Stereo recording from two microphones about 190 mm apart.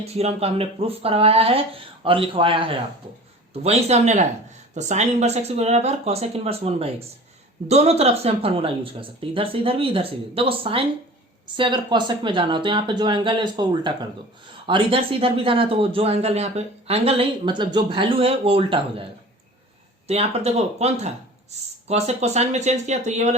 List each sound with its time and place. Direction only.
0.0 s speech: 35° right (ahead or behind)
20.1 s speech: 35° right (ahead or behind)